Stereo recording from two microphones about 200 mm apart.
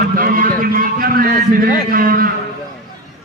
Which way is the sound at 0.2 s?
45° right (ahead or behind).